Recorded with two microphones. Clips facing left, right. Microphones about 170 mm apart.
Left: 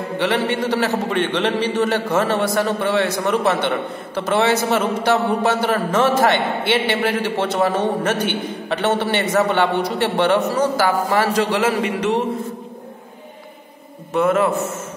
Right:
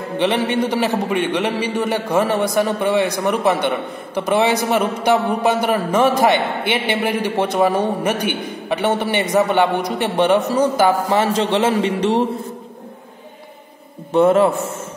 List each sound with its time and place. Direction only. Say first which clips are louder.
0.2 s a man's voice: right 2 dB; 20° right (ahead or behind)
14.1 s a man's voice: right 4 dB; 30° right (ahead or behind)